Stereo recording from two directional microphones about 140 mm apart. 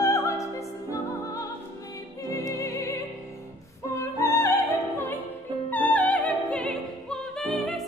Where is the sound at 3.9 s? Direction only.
20° left (ahead or behind).